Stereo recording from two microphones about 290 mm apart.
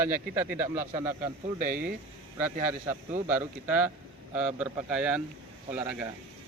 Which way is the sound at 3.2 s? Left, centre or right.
Centre.